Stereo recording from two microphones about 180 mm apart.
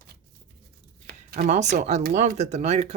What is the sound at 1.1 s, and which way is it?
Speech, 50° right (ahead or behind).